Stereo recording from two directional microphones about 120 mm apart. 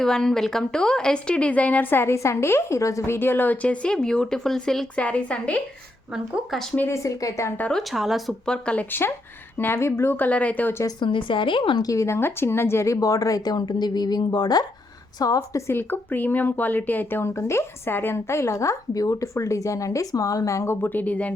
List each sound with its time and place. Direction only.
0.0 s a woman's voice: 5° left (ahead or behind)
6.3 s speech: centre (ahead or behind)
6.7 s speech: 20° left (ahead or behind)
7.6 s a woman's voice: 5° left (ahead or behind)
10.8 s a woman's voice: 45° left (ahead or behind)
11.9 s speech: 25° left (ahead or behind)